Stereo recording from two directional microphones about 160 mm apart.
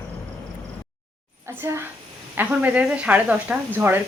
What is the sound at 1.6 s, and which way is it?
Speech, 15° right (ahead or behind).